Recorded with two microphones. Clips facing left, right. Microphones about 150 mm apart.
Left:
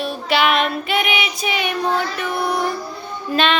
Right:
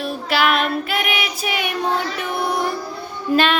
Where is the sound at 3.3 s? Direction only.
10° right (ahead or behind).